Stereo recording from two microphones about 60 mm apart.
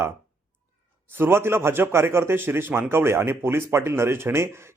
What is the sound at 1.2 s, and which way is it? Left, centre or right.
A man's voice, right.